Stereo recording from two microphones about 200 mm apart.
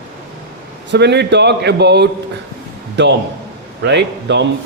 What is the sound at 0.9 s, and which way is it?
A man's voice, 60° right (ahead or behind).